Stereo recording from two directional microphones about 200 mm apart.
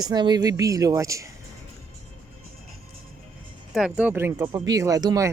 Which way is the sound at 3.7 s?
5° right (ahead or behind).